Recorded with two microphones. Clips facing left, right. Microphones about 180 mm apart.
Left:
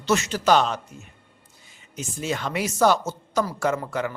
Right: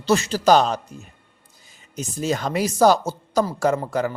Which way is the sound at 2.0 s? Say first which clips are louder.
Right 4 dB; 40° right (ahead or behind).